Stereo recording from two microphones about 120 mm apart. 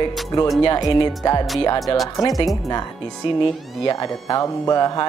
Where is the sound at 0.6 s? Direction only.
40° left (ahead or behind).